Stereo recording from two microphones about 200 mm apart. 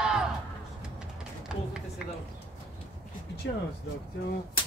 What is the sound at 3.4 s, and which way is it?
Speech, 65° left (ahead or behind).